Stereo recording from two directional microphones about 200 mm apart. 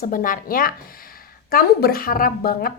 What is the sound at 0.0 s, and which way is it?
A woman's voice, 45° left (ahead or behind).